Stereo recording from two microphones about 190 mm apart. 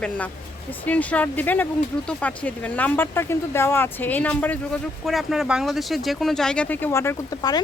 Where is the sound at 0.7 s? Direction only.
10° left (ahead or behind).